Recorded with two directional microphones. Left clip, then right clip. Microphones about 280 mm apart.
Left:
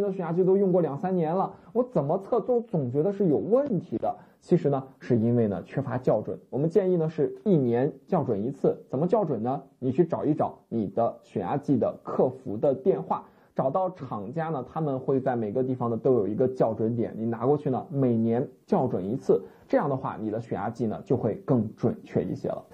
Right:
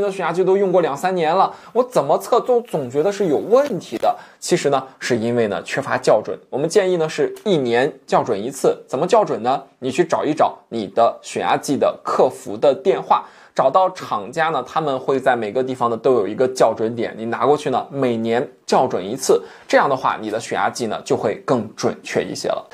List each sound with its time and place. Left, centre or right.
0.0 s speech: centre
2.0 s speech: right
4.5 s speech: centre
12.0 s speech: centre
12.5 s speech: centre